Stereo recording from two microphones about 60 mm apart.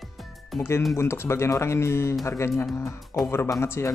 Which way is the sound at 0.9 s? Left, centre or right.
Left.